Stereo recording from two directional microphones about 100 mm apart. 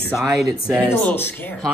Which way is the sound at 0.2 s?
Centre (ahead or behind).